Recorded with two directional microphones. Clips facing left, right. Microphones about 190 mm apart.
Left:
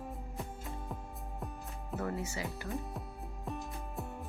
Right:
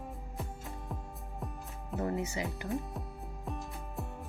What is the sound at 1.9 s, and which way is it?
Speech, 20° right (ahead or behind).